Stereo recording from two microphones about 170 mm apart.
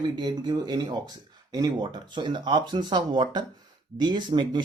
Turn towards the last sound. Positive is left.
turn(degrees=-25)  # may be behind; listen again after turning